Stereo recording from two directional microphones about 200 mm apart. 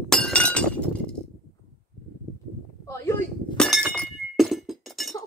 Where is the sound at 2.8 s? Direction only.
15° left (ahead or behind).